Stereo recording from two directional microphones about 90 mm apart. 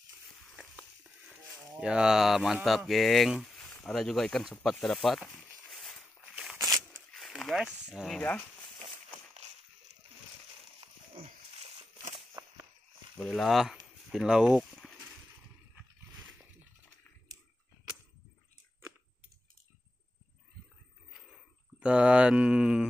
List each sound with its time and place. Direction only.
1.8 s speech: 10° right (ahead or behind)
5.7 s a sound: 5° left (ahead or behind)
7.6 s speech: 5° right (ahead or behind)
10.8 s dog: 90° right
12.4 s whip: 50° right (ahead or behind)
13.2 s speech: centre (ahead or behind)
21.7 s speech: 10° right (ahead or behind)